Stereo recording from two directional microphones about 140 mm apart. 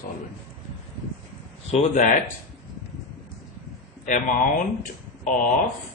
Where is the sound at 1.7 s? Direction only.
60° left (ahead or behind).